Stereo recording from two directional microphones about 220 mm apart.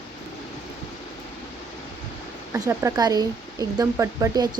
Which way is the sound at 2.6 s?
15° right (ahead or behind).